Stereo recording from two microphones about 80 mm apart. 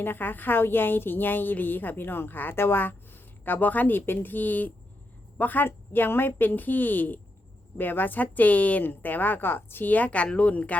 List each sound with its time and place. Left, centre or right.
0.0 s a woman's voice: left